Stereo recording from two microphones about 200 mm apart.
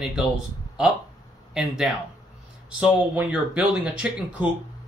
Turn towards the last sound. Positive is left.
turn(degrees=-5)  # may be behind; listen again after turning